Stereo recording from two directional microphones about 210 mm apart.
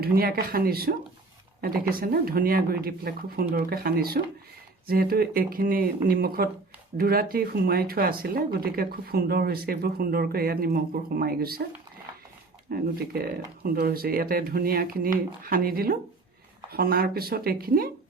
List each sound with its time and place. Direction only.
0.0 s speech: 45° right (ahead or behind)
12.7 s speech: 45° right (ahead or behind)